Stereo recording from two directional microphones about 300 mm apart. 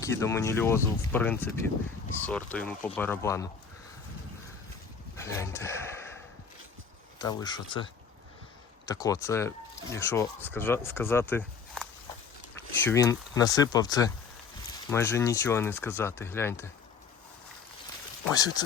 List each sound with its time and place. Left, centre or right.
0.0 s speech: centre
5.2 s speech: centre
7.2 s speech: centre
8.9 s speech: centre
18.3 s speech: centre